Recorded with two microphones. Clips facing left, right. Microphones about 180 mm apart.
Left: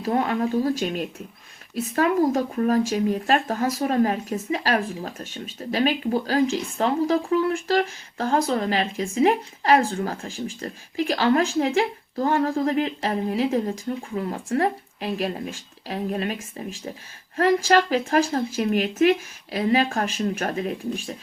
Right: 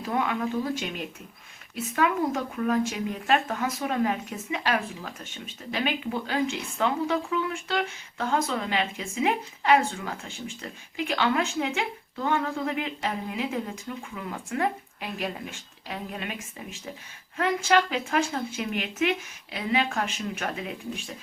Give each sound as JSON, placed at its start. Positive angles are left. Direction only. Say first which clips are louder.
{"t": 0.0, "sound": "speech", "louder": "left 5 dB", "side_deg": 40}